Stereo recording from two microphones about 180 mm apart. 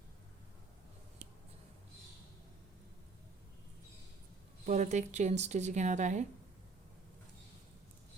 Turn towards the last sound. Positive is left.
turn(degrees=-40)  # may be behind; listen again after turning